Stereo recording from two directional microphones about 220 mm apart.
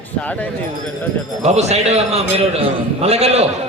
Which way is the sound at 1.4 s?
30° right (ahead or behind).